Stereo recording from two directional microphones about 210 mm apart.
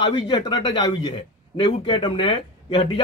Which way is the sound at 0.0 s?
20° left (ahead or behind).